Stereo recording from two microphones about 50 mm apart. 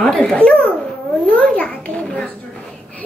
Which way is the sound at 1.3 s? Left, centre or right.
Left.